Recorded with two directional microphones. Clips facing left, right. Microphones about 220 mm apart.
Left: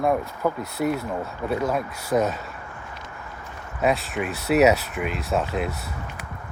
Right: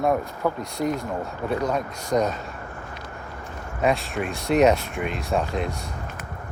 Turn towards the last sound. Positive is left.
turn(degrees=5)  # may be behind; listen again after turning